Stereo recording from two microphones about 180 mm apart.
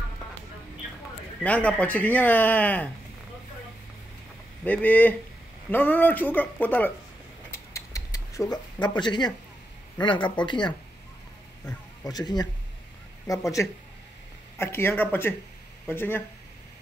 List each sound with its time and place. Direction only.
1.4 s speech: 10° left (ahead or behind)
4.8 s speech: 10° left (ahead or behind)
7.5 s a sound: 15° left (ahead or behind)
9.9 s speech: 25° left (ahead or behind)
12.0 s speech: 20° left (ahead or behind)
13.6 s speech: 15° left (ahead or behind)